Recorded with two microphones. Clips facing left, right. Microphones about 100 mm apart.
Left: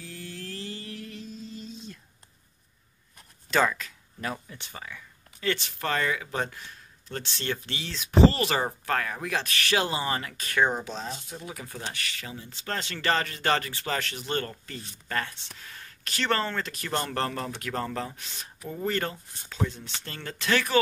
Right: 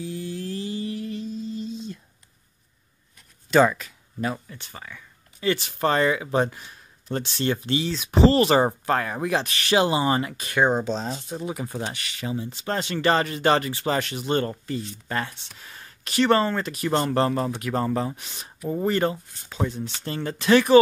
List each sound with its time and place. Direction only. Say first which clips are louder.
0.0 s music: right 9 dB; 15° right (ahead or behind); by 2.0 s centre (ahead or behind)
3.4 s speech: right 7 dB; 10° right (ahead or behind)
5.8 s speech: right 7 dB; 25° right (ahead or behind)
8.3 s speech: right 9 dB; 25° right (ahead or behind)